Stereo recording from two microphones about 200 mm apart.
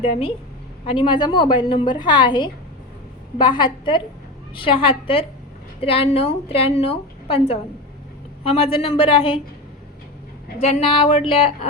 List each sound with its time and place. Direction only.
0.0 s a woman's voice: 25° left (ahead or behind)
10.6 s a woman's voice: 30° left (ahead or behind)